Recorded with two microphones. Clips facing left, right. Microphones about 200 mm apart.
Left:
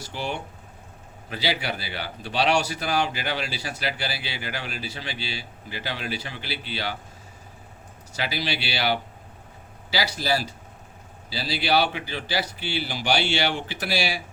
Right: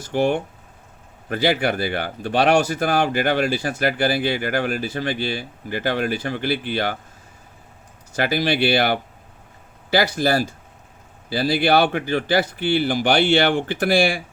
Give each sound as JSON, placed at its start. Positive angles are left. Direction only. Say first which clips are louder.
{"t": 0.0, "sound": "speech", "louder": "right 11 dB", "side_deg": -50}
{"t": 8.1, "sound": "speech", "louder": "right 9 dB", "side_deg": -50}